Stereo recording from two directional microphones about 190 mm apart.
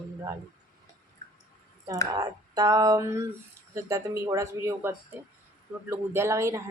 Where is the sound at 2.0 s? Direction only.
20° right (ahead or behind).